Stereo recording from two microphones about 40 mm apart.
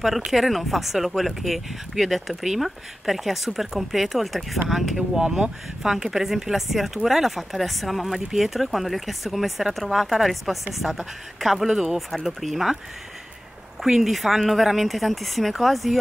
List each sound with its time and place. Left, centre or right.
0.3 s speech: centre
11.7 s speech: centre
12.1 s speech: centre
13.8 s speech: centre